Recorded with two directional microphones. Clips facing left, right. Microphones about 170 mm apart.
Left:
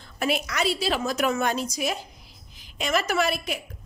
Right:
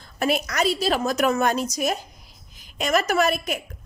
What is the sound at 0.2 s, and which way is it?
A woman's voice, 40° right (ahead or behind).